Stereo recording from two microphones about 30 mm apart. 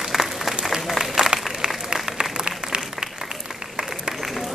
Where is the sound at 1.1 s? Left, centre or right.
Right.